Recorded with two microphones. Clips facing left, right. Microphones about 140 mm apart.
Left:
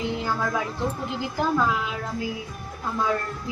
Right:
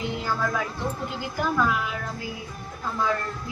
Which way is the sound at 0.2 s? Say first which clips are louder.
Left 1 dB; 20° left (ahead or behind).